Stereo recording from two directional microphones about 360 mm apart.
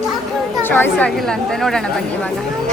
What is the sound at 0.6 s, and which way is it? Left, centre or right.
A woman's voice, centre.